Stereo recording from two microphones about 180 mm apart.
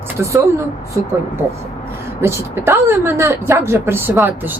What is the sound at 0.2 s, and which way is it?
Speech, 15° right (ahead or behind).